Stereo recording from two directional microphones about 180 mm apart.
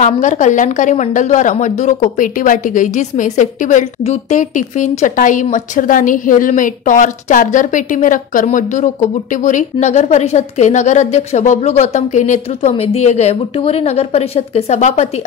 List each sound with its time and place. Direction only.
0.0 s a woman's voice: 45° left (ahead or behind)